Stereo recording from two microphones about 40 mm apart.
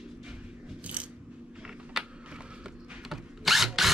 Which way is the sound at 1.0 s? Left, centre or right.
Right.